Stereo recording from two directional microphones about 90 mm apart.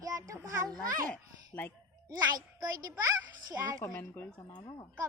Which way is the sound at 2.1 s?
45° right (ahead or behind).